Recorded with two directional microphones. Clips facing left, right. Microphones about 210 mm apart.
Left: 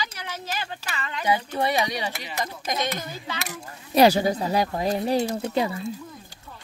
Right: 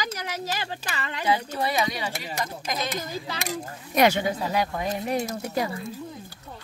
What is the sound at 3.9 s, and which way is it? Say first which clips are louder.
Speech: left 4 dB; 35° left (ahead or behind).